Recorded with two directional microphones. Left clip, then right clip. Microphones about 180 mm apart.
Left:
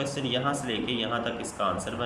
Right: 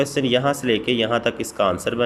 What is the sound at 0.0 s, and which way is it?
A man's voice, 45° right (ahead or behind).